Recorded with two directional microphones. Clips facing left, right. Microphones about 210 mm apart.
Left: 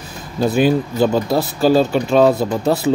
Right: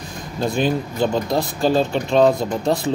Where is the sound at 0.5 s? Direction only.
5° left (ahead or behind).